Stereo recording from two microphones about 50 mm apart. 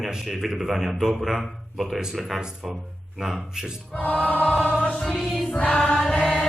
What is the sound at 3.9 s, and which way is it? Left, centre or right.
Choir, left.